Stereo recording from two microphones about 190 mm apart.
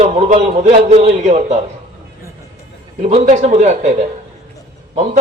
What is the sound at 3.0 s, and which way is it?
Speech, 35° right (ahead or behind).